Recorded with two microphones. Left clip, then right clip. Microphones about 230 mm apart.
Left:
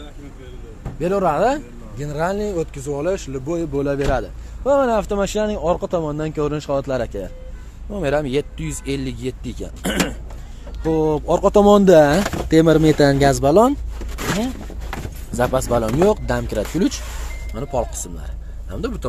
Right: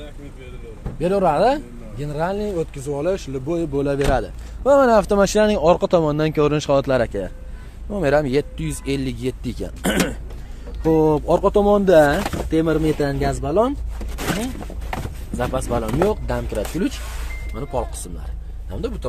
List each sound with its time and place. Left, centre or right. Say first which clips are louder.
0.9 s speech: right 1 dB; centre
11.5 s speech: left 4 dB; left
15.3 s speech: left 5 dB; centre